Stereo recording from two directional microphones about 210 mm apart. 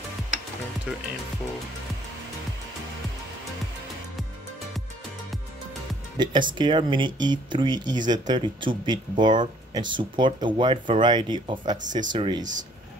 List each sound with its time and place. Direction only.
6.1 s speech: 20° right (ahead or behind)